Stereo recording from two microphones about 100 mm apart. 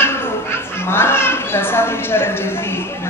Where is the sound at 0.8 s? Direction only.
25° left (ahead or behind).